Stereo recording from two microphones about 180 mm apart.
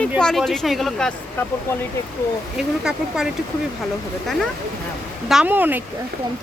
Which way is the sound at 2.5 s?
5° right (ahead or behind).